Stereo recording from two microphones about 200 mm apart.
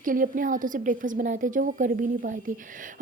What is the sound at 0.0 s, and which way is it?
A woman's voice, 45° right (ahead or behind).